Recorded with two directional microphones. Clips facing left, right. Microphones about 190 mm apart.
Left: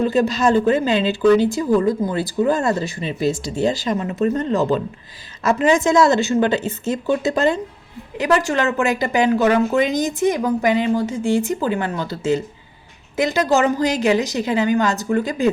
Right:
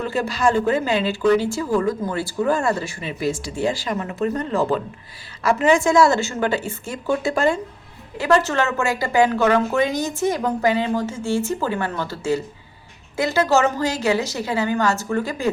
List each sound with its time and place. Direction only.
0.0 s a woman's voice: 20° left (ahead or behind)